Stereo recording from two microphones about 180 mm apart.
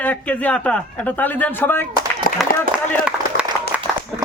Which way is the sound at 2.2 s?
55° left (ahead or behind).